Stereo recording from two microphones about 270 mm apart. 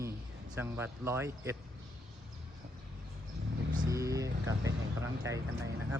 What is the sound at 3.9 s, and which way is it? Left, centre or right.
A man's voice, centre.